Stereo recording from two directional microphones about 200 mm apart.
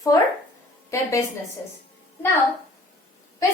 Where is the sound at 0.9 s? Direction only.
15° left (ahead or behind).